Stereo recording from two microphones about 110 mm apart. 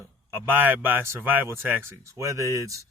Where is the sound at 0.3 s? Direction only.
20° right (ahead or behind).